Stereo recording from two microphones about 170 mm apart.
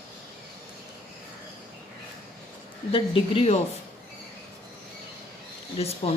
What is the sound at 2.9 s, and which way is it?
Speech, 30° left (ahead or behind).